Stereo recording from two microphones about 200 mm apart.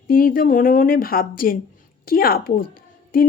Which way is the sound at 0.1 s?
45° left (ahead or behind).